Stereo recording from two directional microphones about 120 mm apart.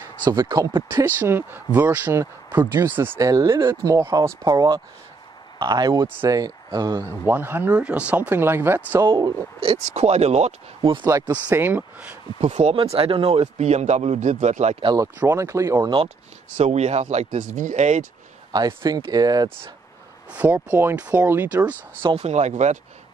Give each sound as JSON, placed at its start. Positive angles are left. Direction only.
{"t": 0.2, "sound": "speech", "side_deg": -35}
{"t": 0.8, "sound": "speech", "side_deg": -20}
{"t": 9.0, "sound": "speech", "side_deg": -40}
{"t": 9.6, "sound": "speech", "side_deg": -55}
{"t": 11.1, "sound": "speech", "side_deg": -25}
{"t": 12.4, "sound": "speech", "side_deg": -70}
{"t": 15.1, "sound": "speech", "side_deg": -20}
{"t": 16.5, "sound": "speech", "side_deg": -70}
{"t": 18.5, "sound": "speech", "side_deg": -35}
{"t": 20.2, "sound": "speech", "side_deg": -15}
{"t": 22.2, "sound": "speech", "side_deg": -70}